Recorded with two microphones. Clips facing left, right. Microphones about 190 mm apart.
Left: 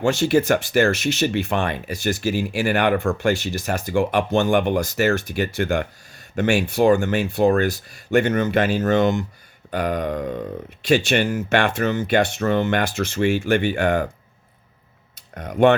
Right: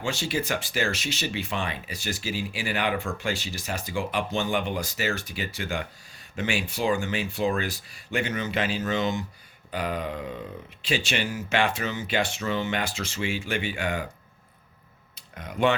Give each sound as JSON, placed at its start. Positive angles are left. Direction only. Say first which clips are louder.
{"t": 0.2, "sound": "speech", "louder": "left 11 dB", "side_deg": 50}
{"t": 3.6, "sound": "speech", "louder": "left 8 dB", "side_deg": 45}
{"t": 3.8, "sound": "speech", "louder": "left 9 dB", "side_deg": 55}
{"t": 4.9, "sound": "speech", "louder": "left 10 dB", "side_deg": 65}
{"t": 5.2, "sound": "speech", "louder": "left 10 dB", "side_deg": 45}
{"t": 5.5, "sound": "speech", "louder": "left 10 dB", "side_deg": 65}
{"t": 7.0, "sound": "speech", "louder": "left 8 dB", "side_deg": 50}
{"t": 10.8, "sound": "speech", "louder": "left 9 dB", "side_deg": 65}
{"t": 15.4, "sound": "speech", "louder": "left 8 dB", "side_deg": 60}